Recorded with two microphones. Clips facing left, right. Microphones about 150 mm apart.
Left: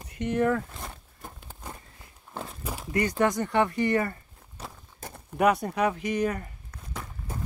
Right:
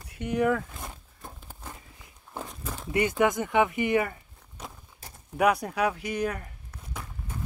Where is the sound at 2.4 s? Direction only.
5° left (ahead or behind).